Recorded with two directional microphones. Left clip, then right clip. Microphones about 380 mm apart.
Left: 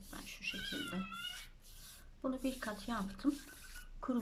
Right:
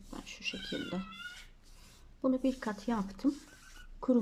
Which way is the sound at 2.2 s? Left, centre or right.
Centre.